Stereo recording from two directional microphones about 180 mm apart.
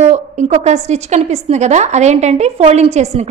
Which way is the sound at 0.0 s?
40° right (ahead or behind).